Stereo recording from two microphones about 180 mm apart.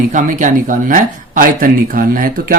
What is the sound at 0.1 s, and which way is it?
Speech, 45° right (ahead or behind).